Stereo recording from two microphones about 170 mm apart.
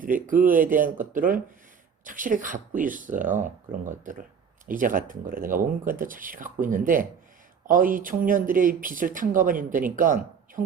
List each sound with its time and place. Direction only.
0.0 s speech: 55° right (ahead or behind)